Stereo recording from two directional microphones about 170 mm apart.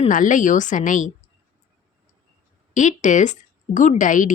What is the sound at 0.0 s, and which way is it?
Speech, 50° left (ahead or behind).